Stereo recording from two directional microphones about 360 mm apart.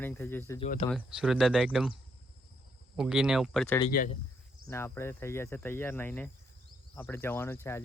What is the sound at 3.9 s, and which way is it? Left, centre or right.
Speech, left.